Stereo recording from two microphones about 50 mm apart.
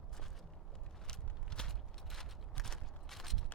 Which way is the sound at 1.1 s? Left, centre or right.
Centre.